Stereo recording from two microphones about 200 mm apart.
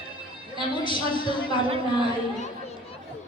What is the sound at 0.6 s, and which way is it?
A woman's voice, 25° left (ahead or behind).